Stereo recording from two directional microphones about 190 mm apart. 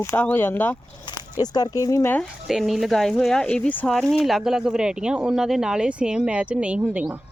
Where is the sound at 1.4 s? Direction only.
20° left (ahead or behind).